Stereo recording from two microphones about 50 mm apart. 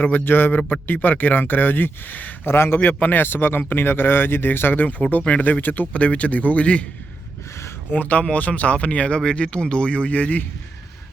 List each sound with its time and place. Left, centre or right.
0.0 s speech: left
2.5 s a man's voice: left
7.9 s speech: left